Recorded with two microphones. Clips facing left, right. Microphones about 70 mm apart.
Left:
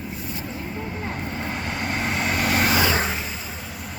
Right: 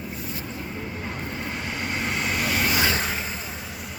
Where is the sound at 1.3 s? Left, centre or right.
Left.